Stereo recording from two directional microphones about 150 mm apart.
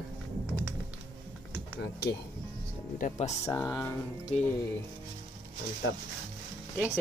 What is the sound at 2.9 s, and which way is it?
Speech, 55° left (ahead or behind).